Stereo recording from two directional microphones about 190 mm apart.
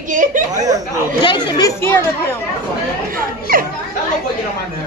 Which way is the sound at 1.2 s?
25° left (ahead or behind).